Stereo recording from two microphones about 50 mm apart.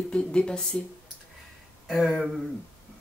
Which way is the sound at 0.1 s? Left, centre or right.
Centre.